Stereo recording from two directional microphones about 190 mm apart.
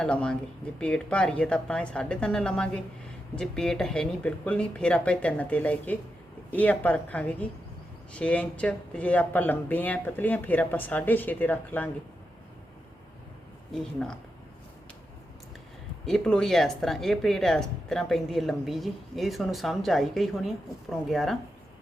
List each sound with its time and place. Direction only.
0.0 s speech: 5° left (ahead or behind)
13.7 s speech: 5° left (ahead or behind)
16.0 s speech: 5° left (ahead or behind)